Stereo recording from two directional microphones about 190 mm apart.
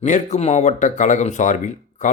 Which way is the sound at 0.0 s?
40° left (ahead or behind).